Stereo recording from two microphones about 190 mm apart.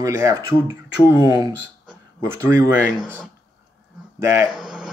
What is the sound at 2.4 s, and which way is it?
Speech, 15° right (ahead or behind).